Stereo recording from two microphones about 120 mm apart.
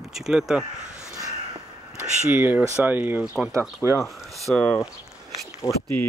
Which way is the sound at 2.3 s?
15° right (ahead or behind).